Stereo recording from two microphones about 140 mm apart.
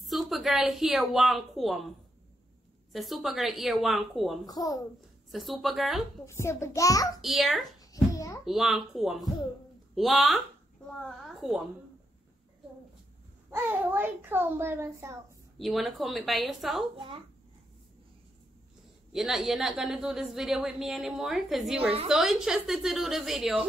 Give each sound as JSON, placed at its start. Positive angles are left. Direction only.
{"t": 0.0, "sound": "a woman's voice", "side_deg": 0}
{"t": 2.9, "sound": "a woman's voice", "side_deg": 0}
{"t": 4.5, "sound": "a child's voice", "side_deg": 25}
{"t": 5.3, "sound": "a woman's voice", "side_deg": 0}
{"t": 6.2, "sound": "a child's voice", "side_deg": 20}
{"t": 7.2, "sound": "a woman's voice", "side_deg": 0}
{"t": 7.8, "sound": "a sound", "side_deg": 25}
{"t": 8.5, "sound": "a woman's voice", "side_deg": 0}
{"t": 13.7, "sound": "a child's voice", "side_deg": -15}
{"t": 15.6, "sound": "a woman's voice", "side_deg": 0}
{"t": 19.1, "sound": "a woman's voice", "side_deg": -5}